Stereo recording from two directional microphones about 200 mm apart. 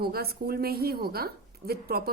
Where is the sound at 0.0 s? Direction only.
50° right (ahead or behind).